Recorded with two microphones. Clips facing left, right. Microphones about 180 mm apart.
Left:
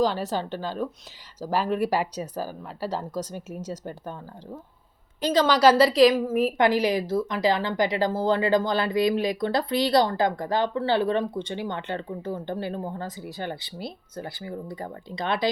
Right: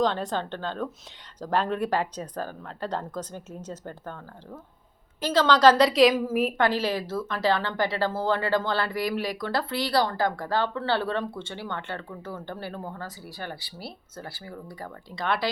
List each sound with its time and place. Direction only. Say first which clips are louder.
0.0 s a woman's voice: left 1 dB; 5° left (ahead or behind)
5.2 s a woman's voice: even; 15° left (ahead or behind); by 6.5 s 5° right (ahead or behind)
6.6 s a woman's voice: left 3 dB; 15° left (ahead or behind)